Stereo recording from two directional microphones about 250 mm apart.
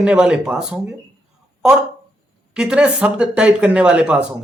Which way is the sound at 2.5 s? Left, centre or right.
Centre.